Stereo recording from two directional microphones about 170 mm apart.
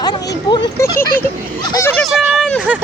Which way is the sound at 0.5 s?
25° left (ahead or behind).